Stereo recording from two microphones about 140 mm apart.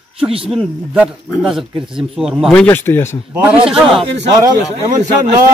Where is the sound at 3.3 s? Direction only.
15° right (ahead or behind).